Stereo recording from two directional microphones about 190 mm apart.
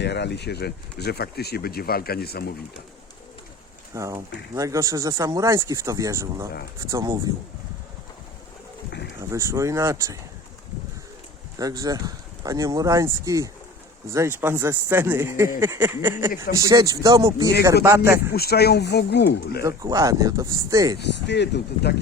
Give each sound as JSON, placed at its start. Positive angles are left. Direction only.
{"t": 0.0, "sound": "speech", "side_deg": 65}
{"t": 3.9, "sound": "speech", "side_deg": -15}
{"t": 9.1, "sound": "speech", "side_deg": -15}
{"t": 11.5, "sound": "speech", "side_deg": -20}
{"t": 18.3, "sound": "speech", "side_deg": 55}
{"t": 19.6, "sound": "speech", "side_deg": -15}
{"t": 21.0, "sound": "speech", "side_deg": 65}